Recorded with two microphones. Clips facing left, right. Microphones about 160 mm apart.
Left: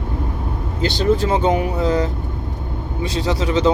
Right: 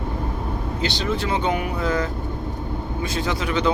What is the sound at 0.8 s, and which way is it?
Speech, 45° left (ahead or behind).